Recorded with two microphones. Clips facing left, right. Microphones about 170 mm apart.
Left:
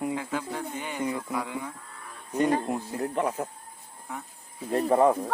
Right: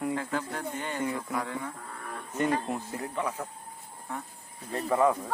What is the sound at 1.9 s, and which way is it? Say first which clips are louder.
Livestock: right 6 dB; 60° right (ahead or behind).